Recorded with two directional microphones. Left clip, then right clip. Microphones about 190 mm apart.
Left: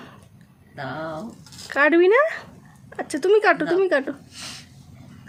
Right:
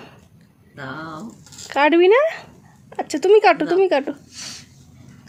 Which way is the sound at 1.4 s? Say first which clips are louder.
Right 2 dB; 20° right (ahead or behind).